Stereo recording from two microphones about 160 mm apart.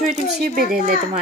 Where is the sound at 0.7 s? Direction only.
70° right (ahead or behind).